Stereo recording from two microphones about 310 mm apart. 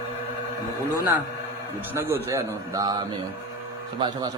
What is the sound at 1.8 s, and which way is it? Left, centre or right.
A man's voice, centre.